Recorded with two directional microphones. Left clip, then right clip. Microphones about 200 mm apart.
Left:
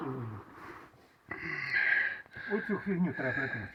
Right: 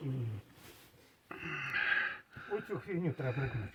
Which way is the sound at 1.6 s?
25° right (ahead or behind).